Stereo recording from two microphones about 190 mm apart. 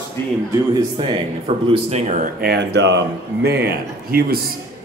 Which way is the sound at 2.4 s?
60° right (ahead or behind).